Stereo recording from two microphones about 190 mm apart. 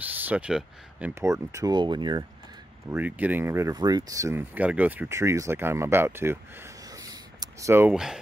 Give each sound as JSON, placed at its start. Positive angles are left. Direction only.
{"t": 0.2, "sound": "speech", "side_deg": -5}
{"t": 1.2, "sound": "speech", "side_deg": -15}
{"t": 2.9, "sound": "speech", "side_deg": -10}
{"t": 6.9, "sound": "a sound", "side_deg": -20}